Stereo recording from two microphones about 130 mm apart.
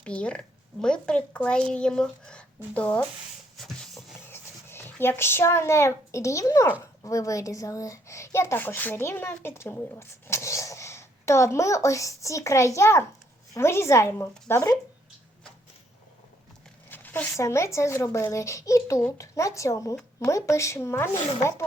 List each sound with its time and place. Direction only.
0.0 s a woman's voice: 10° left (ahead or behind)
4.3 s a child's voice: 20° left (ahead or behind)
16.9 s a child's voice: 15° left (ahead or behind)